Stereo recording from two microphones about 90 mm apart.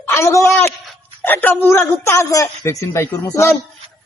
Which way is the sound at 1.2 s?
20° left (ahead or behind).